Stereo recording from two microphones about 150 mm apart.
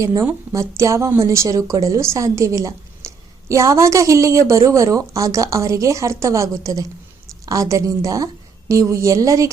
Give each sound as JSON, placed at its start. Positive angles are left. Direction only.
{"t": 0.0, "sound": "a woman's voice", "side_deg": -20}